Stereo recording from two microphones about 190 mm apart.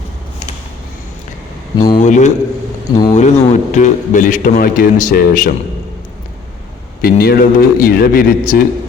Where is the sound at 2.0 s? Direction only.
40° left (ahead or behind).